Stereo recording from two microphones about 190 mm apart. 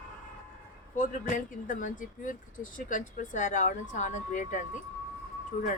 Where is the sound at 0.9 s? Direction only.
45° left (ahead or behind).